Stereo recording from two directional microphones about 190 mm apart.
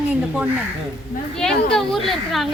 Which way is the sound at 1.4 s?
5° left (ahead or behind).